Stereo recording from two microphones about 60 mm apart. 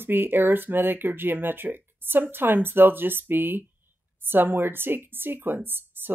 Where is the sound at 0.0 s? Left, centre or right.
Right.